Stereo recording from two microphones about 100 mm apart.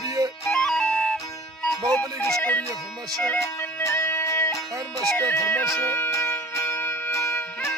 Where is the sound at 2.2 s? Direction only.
10° left (ahead or behind).